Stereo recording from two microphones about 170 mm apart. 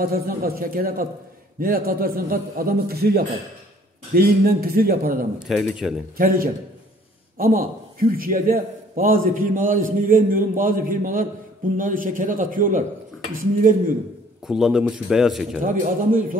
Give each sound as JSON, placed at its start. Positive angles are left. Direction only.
{"t": 0.0, "sound": "a man's voice", "side_deg": -60}
{"t": 5.5, "sound": "a man's voice", "side_deg": 0}
{"t": 6.1, "sound": "a man's voice", "side_deg": -55}
{"t": 14.4, "sound": "a man's voice", "side_deg": -5}
{"t": 15.6, "sound": "a man's voice", "side_deg": -55}